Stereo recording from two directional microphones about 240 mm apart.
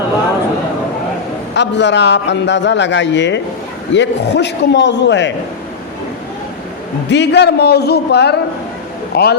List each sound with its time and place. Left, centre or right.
1.5 s a man's voice: left
7.1 s a man's voice: left